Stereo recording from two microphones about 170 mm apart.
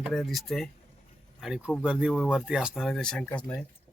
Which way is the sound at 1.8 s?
Centre (ahead or behind).